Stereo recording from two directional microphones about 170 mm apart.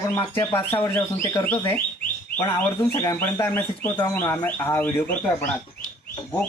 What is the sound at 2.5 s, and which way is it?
Speech, 25° left (ahead or behind).